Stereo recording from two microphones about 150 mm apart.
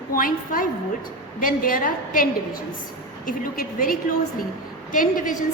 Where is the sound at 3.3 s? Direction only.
65° left (ahead or behind).